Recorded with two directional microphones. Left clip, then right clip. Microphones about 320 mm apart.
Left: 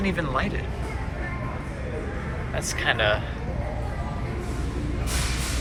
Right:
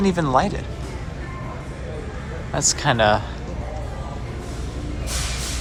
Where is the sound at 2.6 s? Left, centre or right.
Right.